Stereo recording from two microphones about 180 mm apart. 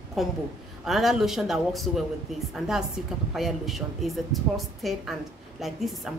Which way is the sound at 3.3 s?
Centre (ahead or behind).